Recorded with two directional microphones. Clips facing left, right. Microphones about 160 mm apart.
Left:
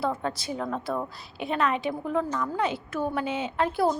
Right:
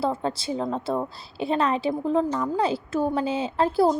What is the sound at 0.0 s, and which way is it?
A woman's voice, 30° right (ahead or behind).